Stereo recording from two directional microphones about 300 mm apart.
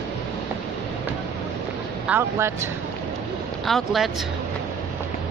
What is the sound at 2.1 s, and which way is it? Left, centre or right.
Speech, centre.